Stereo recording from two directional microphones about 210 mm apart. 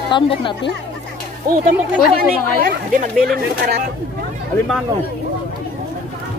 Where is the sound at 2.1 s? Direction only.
45° right (ahead or behind).